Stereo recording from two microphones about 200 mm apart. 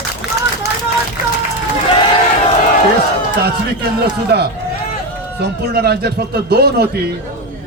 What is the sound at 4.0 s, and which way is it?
A man's voice, 55° right (ahead or behind).